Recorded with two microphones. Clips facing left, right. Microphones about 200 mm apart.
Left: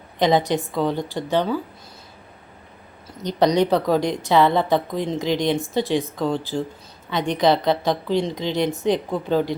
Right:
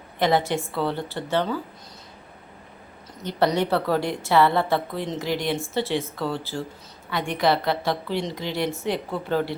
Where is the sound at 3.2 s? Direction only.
15° left (ahead or behind).